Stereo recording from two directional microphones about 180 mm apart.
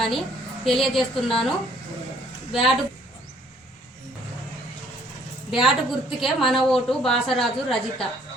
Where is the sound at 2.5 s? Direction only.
Centre (ahead or behind).